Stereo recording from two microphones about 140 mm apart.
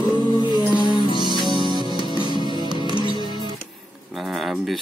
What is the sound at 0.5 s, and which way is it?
Music, 30° left (ahead or behind).